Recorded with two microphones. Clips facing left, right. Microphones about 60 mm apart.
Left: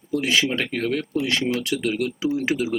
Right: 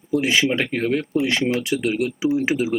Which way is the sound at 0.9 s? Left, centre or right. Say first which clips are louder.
Right 3 dB; right.